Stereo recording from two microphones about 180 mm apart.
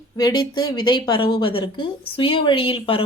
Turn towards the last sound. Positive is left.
turn(degrees=30)  # may be behind; listen again after turning